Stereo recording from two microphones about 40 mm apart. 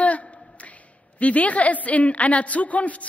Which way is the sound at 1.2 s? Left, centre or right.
Left.